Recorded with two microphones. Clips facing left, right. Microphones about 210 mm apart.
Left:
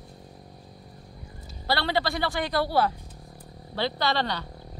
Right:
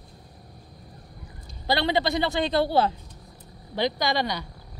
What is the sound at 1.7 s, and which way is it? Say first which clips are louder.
Speech: right 3 dB; 20° right (ahead or behind).